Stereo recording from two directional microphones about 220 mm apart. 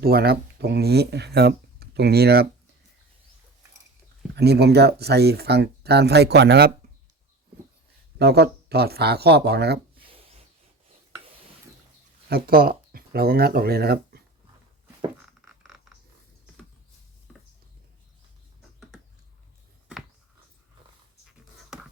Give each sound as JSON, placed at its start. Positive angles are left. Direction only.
{"t": 0.0, "sound": "speech", "side_deg": -45}
{"t": 4.4, "sound": "speech", "side_deg": -45}
{"t": 8.2, "sound": "speech", "side_deg": -50}
{"t": 12.3, "sound": "speech", "side_deg": -45}
{"t": 15.4, "sound": "a sound", "side_deg": -5}
{"t": 17.3, "sound": "a sound", "side_deg": -5}